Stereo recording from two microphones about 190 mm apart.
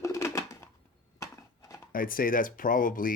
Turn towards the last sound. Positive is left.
turn(degrees=45)  # may be behind; listen again after turning